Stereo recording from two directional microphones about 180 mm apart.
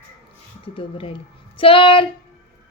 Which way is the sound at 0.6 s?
30° left (ahead or behind).